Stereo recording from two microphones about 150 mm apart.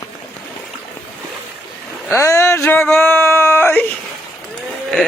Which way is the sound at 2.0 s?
20° left (ahead or behind).